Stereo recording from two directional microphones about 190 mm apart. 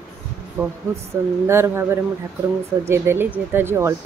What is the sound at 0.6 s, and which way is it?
Speech, 10° right (ahead or behind).